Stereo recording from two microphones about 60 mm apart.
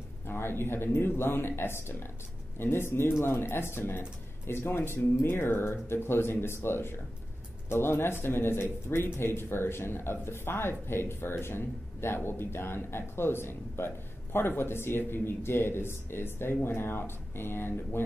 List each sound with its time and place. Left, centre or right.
0.3 s speech: left